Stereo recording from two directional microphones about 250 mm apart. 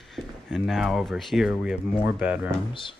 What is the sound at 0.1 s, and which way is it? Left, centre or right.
Speech, centre.